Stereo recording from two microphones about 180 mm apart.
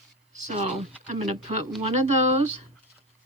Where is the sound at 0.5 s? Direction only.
35° right (ahead or behind).